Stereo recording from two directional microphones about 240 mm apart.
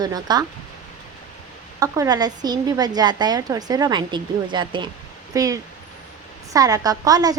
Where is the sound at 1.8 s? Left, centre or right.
Centre.